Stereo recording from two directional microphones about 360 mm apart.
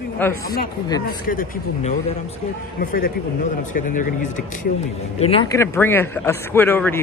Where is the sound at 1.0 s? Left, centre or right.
Left.